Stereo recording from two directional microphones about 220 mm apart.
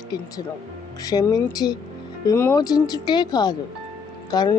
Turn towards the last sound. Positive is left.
turn(degrees=20)  # may be behind; listen again after turning